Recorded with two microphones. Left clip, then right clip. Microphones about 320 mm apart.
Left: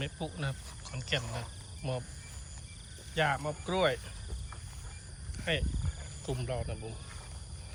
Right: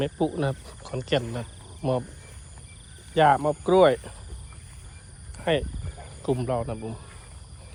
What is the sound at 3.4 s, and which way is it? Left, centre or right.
Speech, right.